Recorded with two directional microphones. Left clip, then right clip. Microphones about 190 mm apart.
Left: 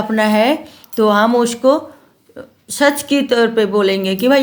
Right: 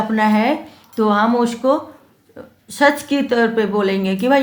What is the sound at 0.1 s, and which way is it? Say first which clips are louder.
A woman's voice: left 5 dB; 40° left (ahead or behind).